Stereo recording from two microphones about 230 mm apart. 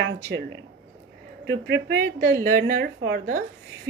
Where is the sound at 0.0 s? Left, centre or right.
Right.